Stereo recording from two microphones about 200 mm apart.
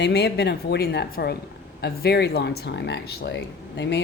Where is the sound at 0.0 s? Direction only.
55° left (ahead or behind).